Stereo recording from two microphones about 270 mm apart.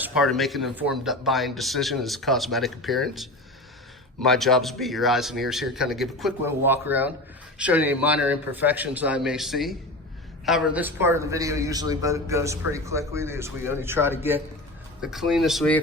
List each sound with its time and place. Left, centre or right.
0.0 s a man's voice: centre